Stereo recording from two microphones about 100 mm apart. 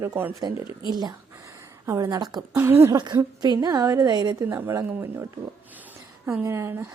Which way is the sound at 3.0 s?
45° right (ahead or behind).